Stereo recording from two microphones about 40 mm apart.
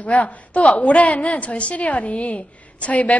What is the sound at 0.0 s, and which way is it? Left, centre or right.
A woman's voice, left.